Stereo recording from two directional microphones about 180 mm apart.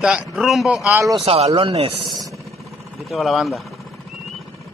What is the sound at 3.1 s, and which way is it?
Speech, centre (ahead or behind).